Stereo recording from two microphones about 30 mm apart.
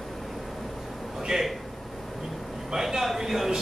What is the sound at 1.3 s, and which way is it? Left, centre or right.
Speech, right.